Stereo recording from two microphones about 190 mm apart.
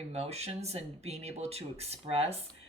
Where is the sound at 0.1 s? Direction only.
35° right (ahead or behind).